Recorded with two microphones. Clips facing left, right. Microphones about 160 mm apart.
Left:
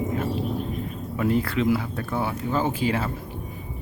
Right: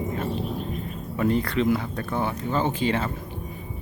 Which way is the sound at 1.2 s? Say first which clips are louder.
Even; 5° left (ahead or behind).